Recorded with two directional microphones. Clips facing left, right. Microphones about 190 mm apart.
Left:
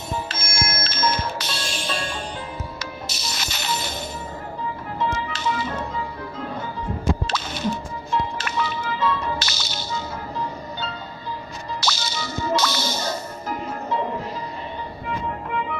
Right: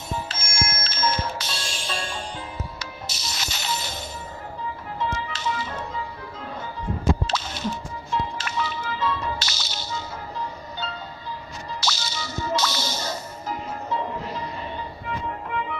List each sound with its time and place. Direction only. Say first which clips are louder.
0.3 s music: left 2 dB; 65° left (ahead or behind)
5.3 s music: left 3 dB; 60° left (ahead or behind)
7.2 s music: left 2 dB; 60° left (ahead or behind)
11.8 s music: left 3 dB; 60° left (ahead or behind)